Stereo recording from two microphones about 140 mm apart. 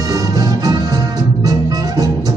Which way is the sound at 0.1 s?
25° right (ahead or behind).